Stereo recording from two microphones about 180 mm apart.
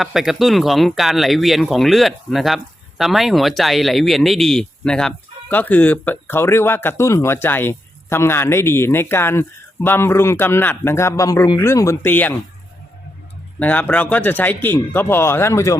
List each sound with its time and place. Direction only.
0.0 s speech: centre (ahead or behind)
13.6 s speech: 10° left (ahead or behind)